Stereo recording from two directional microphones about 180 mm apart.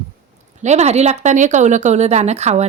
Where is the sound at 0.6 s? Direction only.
40° right (ahead or behind).